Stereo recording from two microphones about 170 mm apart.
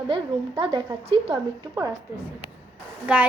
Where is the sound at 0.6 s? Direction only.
30° right (ahead or behind).